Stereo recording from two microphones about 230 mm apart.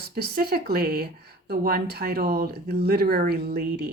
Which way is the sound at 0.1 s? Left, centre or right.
Right.